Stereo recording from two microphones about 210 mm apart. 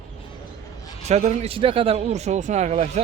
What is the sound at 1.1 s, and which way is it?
Speech, 35° right (ahead or behind).